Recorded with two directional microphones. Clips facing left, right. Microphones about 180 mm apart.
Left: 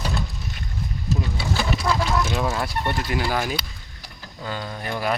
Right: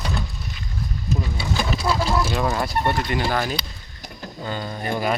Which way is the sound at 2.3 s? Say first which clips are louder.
Right 2 dB; centre (ahead or behind).